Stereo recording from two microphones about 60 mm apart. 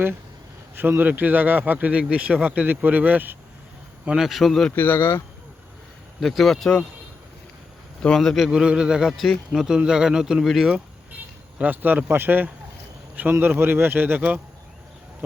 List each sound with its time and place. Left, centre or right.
0.8 s speech: right
4.2 s speech: centre
4.7 s speech: left
6.1 s speech: centre
8.0 s a man's voice: centre
8.4 s speech: centre
11.6 s speech: right